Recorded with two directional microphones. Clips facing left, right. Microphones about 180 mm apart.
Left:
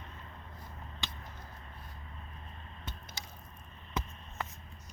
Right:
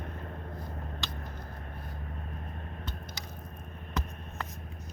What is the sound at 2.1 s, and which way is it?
Vehicle, 55° right (ahead or behind).